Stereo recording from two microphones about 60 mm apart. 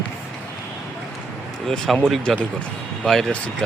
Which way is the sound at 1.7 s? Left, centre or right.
Centre.